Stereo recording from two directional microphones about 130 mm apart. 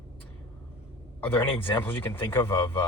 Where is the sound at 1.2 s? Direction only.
15° left (ahead or behind).